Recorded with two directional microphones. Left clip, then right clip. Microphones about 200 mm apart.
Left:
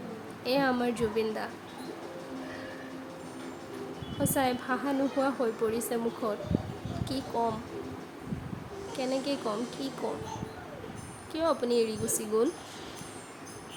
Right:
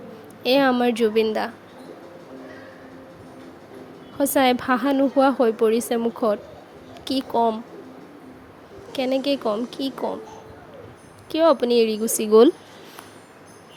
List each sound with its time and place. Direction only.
0.4 s a woman's voice: 45° right (ahead or behind)
4.2 s a woman's voice: 45° right (ahead or behind)
8.9 s speech: 40° right (ahead or behind)
11.3 s a woman's voice: 40° right (ahead or behind)